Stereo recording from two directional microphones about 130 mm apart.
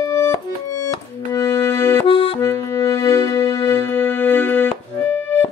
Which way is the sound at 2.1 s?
45° left (ahead or behind).